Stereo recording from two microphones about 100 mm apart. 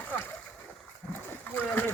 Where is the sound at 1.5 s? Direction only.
20° left (ahead or behind).